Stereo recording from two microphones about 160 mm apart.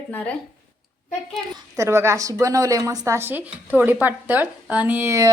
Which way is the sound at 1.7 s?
15° right (ahead or behind).